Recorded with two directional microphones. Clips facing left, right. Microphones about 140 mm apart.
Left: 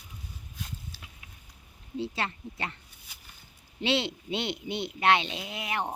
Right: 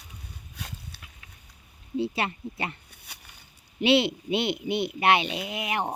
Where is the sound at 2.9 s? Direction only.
65° right (ahead or behind).